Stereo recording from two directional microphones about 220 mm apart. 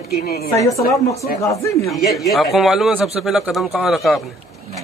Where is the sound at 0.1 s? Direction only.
45° left (ahead or behind).